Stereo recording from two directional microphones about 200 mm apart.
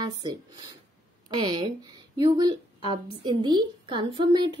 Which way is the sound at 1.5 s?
20° right (ahead or behind).